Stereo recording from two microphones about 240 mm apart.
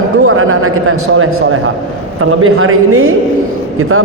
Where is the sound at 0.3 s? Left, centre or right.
Right.